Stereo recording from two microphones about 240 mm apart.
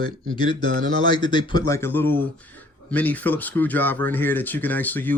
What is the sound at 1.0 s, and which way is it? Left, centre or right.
Speech, centre.